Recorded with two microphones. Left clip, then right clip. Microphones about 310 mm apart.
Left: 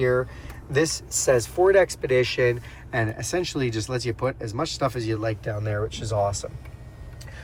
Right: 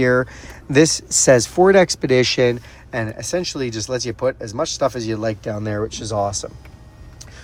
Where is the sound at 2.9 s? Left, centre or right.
Centre.